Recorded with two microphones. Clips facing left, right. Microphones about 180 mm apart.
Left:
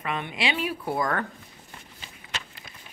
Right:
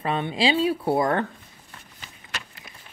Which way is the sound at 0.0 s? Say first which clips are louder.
Right 6 dB; 30° right (ahead or behind).